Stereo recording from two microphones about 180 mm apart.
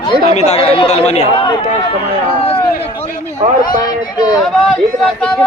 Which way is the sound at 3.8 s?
25° left (ahead or behind).